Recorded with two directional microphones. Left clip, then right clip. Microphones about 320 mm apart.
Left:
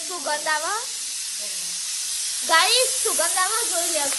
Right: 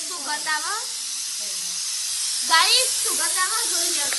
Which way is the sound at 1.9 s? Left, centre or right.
Right.